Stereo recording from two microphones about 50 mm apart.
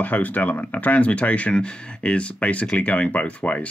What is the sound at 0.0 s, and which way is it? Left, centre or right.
Speech, left.